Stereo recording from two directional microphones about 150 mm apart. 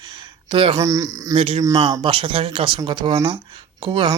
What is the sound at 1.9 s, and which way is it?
Speech, 35° right (ahead or behind).